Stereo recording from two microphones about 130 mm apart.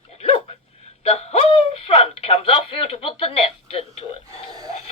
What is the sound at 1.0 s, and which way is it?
Speech, 50° left (ahead or behind).